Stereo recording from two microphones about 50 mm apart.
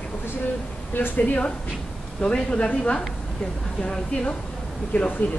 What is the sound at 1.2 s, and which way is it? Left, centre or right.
A woman's voice, left.